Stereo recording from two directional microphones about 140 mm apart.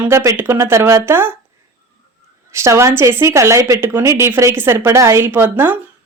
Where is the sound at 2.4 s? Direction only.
20° right (ahead or behind).